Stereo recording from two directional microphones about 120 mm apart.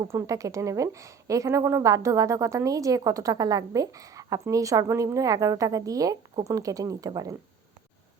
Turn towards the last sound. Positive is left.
turn(degrees=-30)  # may be behind; listen again after turning